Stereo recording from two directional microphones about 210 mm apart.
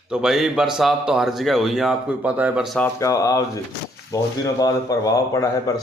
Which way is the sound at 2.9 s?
15° left (ahead or behind).